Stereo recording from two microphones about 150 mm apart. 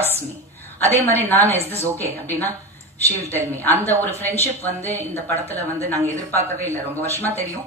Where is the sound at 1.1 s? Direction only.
15° left (ahead or behind).